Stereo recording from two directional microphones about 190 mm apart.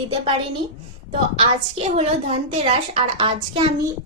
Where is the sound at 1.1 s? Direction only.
30° right (ahead or behind).